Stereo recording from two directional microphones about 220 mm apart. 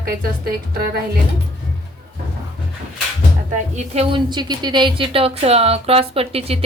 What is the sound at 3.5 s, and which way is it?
A woman's voice, 25° right (ahead or behind).